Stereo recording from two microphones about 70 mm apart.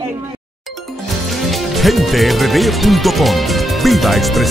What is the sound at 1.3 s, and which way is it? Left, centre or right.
Speech, centre.